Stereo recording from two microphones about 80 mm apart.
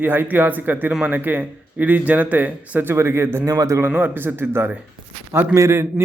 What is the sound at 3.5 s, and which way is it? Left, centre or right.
Speech, right.